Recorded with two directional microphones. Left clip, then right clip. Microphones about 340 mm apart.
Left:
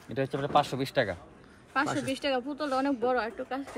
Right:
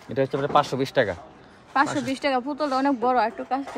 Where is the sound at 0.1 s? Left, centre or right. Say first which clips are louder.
Right 6 dB; right.